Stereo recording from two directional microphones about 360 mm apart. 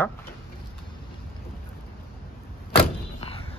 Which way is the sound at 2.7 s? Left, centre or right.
Centre.